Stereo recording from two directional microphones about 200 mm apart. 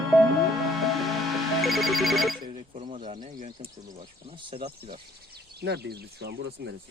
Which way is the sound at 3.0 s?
35° right (ahead or behind).